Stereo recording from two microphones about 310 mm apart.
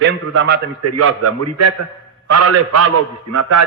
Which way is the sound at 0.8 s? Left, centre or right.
Right.